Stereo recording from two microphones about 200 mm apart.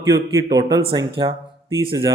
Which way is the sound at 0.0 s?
15° right (ahead or behind).